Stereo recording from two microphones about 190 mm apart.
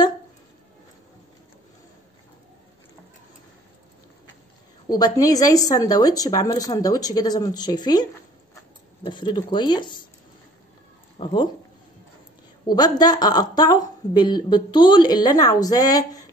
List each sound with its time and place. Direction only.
4.8 s speech: 20° left (ahead or behind)
11.2 s speech: 30° left (ahead or behind)
12.6 s speech: 20° left (ahead or behind)